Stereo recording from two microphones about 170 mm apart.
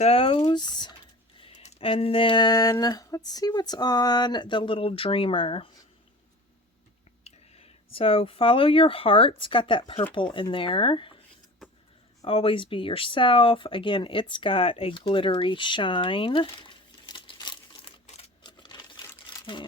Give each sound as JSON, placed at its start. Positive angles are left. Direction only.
{"t": 0.0, "sound": "speech", "side_deg": 35}
{"t": 1.4, "sound": "speech", "side_deg": 40}
{"t": 7.3, "sound": "speech", "side_deg": 35}
{"t": 12.2, "sound": "speech", "side_deg": 35}
{"t": 18.0, "sound": "a sound", "side_deg": 40}
{"t": 18.4, "sound": "computer keyboard", "side_deg": 25}